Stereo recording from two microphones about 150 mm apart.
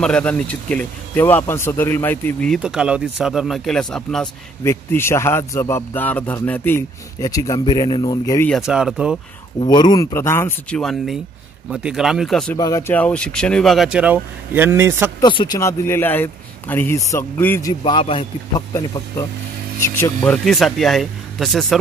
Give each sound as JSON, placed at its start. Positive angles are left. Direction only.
{"t": 0.0, "sound": "speech", "side_deg": 5}
{"t": 2.5, "sound": "speech", "side_deg": -5}
{"t": 4.6, "sound": "speech", "side_deg": 15}
{"t": 7.2, "sound": "a man's voice", "side_deg": 25}
{"t": 8.5, "sound": "speech", "side_deg": -5}
{"t": 9.6, "sound": "a man's voice", "side_deg": 30}
{"t": 10.1, "sound": "speech", "side_deg": 15}
{"t": 10.8, "sound": "speech", "side_deg": 0}
{"t": 12.5, "sound": "a man's voice", "side_deg": 25}
{"t": 12.9, "sound": "speech", "side_deg": 10}
{"t": 15.1, "sound": "a man's voice", "side_deg": 30}
{"t": 18.7, "sound": "a man's voice", "side_deg": 20}
{"t": 20.2, "sound": "speech", "side_deg": 5}